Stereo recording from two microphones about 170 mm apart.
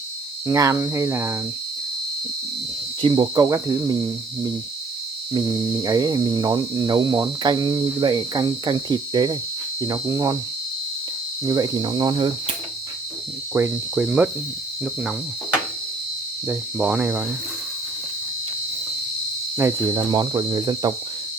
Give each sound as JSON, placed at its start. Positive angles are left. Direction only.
{"t": 0.4, "sound": "speech", "side_deg": -20}
{"t": 3.0, "sound": "cricket", "side_deg": -25}
{"t": 11.4, "sound": "cricket", "side_deg": -20}
{"t": 13.5, "sound": "speech", "side_deg": -10}
{"t": 16.5, "sound": "speech", "side_deg": -10}
{"t": 19.5, "sound": "cricket", "side_deg": -20}